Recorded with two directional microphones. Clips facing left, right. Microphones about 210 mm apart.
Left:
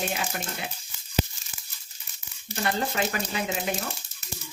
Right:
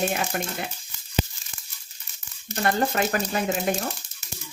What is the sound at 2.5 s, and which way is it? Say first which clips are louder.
Speech: right 4 dB; 50° right (ahead or behind).